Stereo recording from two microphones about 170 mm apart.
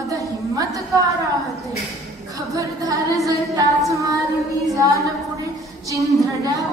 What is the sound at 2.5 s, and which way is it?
A woman's voice, 20° right (ahead or behind).